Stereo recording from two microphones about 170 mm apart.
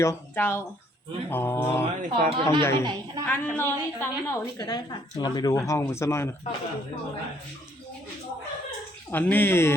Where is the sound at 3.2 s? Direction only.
10° left (ahead or behind).